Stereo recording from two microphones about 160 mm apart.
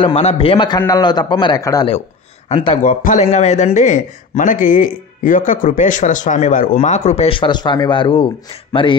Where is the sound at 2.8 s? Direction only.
55° left (ahead or behind).